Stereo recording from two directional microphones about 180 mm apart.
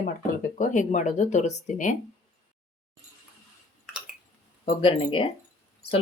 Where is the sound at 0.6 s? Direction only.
45° left (ahead or behind).